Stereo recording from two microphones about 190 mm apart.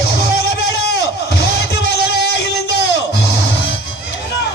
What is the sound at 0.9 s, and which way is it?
Music, 60° left (ahead or behind).